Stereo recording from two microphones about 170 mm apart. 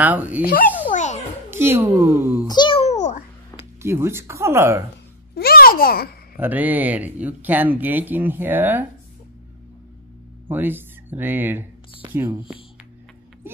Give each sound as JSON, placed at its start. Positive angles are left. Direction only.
{"t": 0.0, "sound": "speech", "side_deg": -10}
{"t": 0.4, "sound": "speech", "side_deg": 60}
{"t": 0.9, "sound": "a sound", "side_deg": 45}
{"t": 1.5, "sound": "speech", "side_deg": -15}
{"t": 2.4, "sound": "a sound", "side_deg": 25}
{"t": 3.8, "sound": "speech", "side_deg": -15}
{"t": 5.3, "sound": "a sound", "side_deg": 65}
{"t": 6.3, "sound": "speech", "side_deg": -10}
{"t": 10.5, "sound": "speech", "side_deg": -10}